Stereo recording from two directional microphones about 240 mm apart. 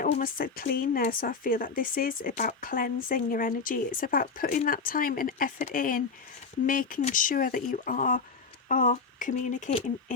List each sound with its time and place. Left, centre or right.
0.0 s speech: left